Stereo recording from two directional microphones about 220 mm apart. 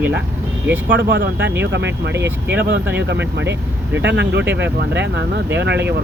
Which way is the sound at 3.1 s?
55° right (ahead or behind).